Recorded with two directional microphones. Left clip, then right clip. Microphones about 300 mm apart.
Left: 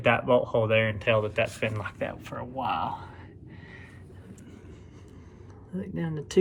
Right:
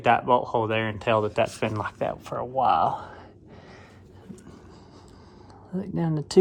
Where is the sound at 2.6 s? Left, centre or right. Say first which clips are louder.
Right 8 dB; centre.